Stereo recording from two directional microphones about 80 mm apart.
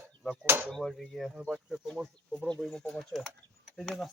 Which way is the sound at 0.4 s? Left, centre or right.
Right.